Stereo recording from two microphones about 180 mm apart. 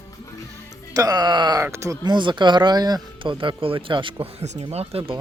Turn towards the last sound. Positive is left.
turn(degrees=-35)  # may be behind; listen again after turning